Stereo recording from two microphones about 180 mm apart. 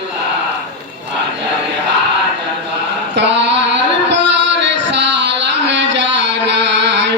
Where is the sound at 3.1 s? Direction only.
75° right (ahead or behind).